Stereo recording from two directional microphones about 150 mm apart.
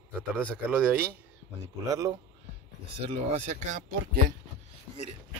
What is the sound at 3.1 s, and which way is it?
Speech, 55° right (ahead or behind).